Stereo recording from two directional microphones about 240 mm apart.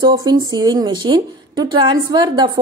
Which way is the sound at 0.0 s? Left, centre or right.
Centre.